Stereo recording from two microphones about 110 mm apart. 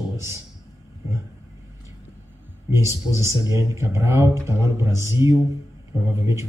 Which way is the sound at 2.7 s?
25° right (ahead or behind).